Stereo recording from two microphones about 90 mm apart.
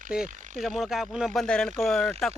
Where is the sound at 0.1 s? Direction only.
5° right (ahead or behind).